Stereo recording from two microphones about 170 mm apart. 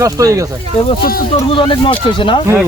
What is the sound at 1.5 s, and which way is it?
Speech, 30° left (ahead or behind).